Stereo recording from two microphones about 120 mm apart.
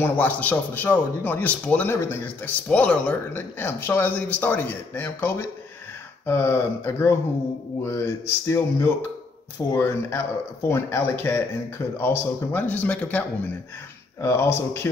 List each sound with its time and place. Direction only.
0.0 s speech: 15° left (ahead or behind)
14.2 s speech: 20° left (ahead or behind)